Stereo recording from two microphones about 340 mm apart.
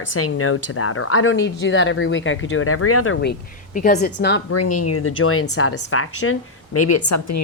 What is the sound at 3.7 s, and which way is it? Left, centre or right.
Speech, left.